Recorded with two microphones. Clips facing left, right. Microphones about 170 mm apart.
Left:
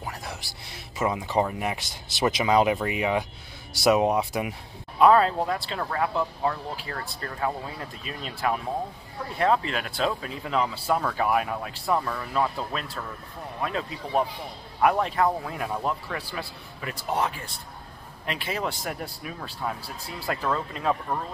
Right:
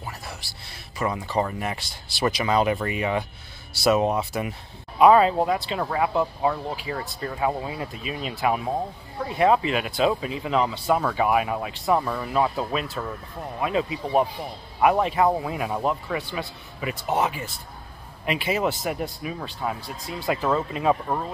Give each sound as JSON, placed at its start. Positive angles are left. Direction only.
{"t": 0.2, "sound": "speech", "side_deg": 20}
{"t": 4.9, "sound": "speech", "side_deg": -5}